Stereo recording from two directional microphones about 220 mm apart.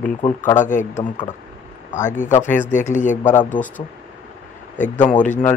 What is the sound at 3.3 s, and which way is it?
Speech, 5° left (ahead or behind).